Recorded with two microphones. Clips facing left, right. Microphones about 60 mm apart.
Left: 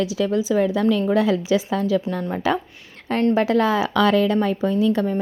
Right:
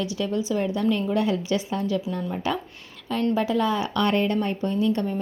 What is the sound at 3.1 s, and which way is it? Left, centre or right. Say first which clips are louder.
A woman's voice: left 5 dB; left.